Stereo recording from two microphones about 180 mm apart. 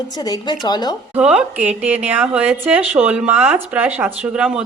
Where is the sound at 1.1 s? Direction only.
5° right (ahead or behind).